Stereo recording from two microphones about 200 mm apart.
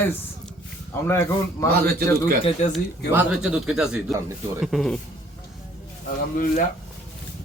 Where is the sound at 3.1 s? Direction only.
5° right (ahead or behind).